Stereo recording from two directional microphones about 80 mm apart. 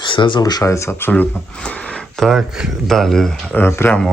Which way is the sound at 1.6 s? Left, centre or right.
Centre.